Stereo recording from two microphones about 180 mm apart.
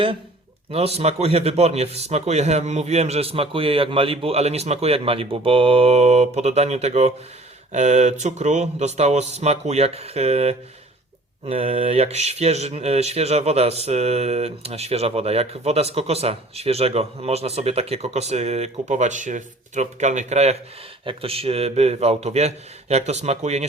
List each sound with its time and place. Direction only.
0.7 s speech: 35° right (ahead or behind)